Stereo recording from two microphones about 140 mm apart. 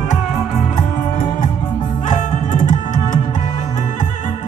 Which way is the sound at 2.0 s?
60° left (ahead or behind).